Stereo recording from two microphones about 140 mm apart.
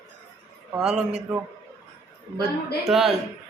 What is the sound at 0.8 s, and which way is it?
Speech, 5° right (ahead or behind).